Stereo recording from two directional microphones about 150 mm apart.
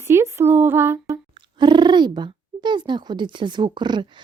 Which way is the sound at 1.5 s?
30° right (ahead or behind).